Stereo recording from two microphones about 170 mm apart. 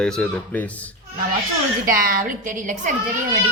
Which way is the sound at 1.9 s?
60° right (ahead or behind).